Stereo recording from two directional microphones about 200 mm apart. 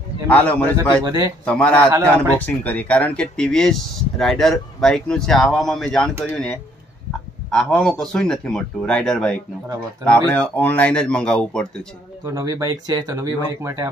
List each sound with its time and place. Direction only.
0.3 s a man's voice: 10° left (ahead or behind)
1.0 s speech: 15° right (ahead or behind)
1.4 s a man's voice: 5° left (ahead or behind)
7.5 s speech: 5° left (ahead or behind)
12.3 s speech: 15° right (ahead or behind)